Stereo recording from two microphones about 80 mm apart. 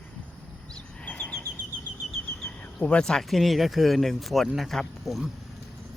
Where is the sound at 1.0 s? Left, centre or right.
Centre.